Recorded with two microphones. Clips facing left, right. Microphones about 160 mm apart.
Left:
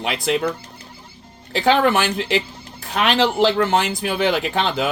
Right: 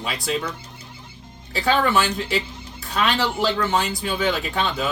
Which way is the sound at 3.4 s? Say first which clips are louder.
Left 5 dB; 65° left (ahead or behind).